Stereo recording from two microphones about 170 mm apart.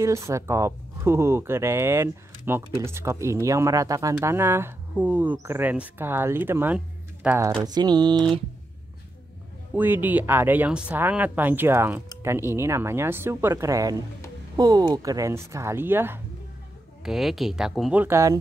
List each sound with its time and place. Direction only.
0.0 s speech: 20° right (ahead or behind)
7.6 s mantra: 25° right (ahead or behind)
9.8 s speech: 10° right (ahead or behind)
17.0 s speech: centre (ahead or behind)
18.0 s speech: 15° right (ahead or behind)